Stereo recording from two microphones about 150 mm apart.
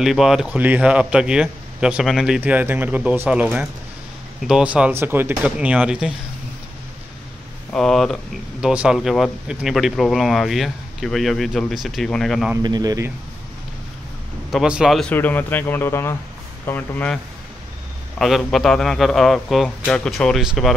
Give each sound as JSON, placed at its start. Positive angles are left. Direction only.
{"t": 0.0, "sound": "a man's voice", "side_deg": 0}
{"t": 7.7, "sound": "speech", "side_deg": 0}
{"t": 12.6, "sound": "a man's voice", "side_deg": -25}
{"t": 14.5, "sound": "speech", "side_deg": -5}
{"t": 15.1, "sound": "speech", "side_deg": 10}
{"t": 18.2, "sound": "speech", "side_deg": 0}